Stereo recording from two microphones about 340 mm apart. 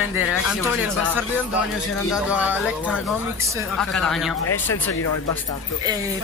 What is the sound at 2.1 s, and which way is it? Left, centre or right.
Speech, centre.